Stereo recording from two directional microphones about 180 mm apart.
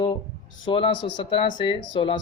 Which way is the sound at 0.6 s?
25° left (ahead or behind).